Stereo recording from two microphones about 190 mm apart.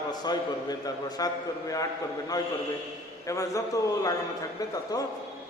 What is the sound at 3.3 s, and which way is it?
Speech, 15° left (ahead or behind).